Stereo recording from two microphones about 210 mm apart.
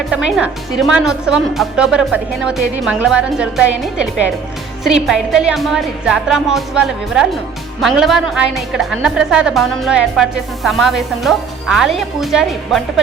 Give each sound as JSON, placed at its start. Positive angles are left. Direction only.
{"t": 0.3, "sound": "a woman's voice", "side_deg": -5}
{"t": 4.8, "sound": "a woman's voice", "side_deg": 0}